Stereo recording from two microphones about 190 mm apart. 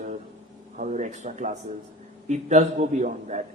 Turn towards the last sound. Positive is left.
turn(degrees=-40)  # may be behind; listen again after turning